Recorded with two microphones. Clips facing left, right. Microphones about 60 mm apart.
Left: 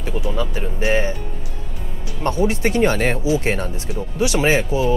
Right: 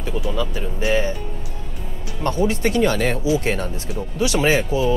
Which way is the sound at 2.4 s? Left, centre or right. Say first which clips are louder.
Left 1 dB; left.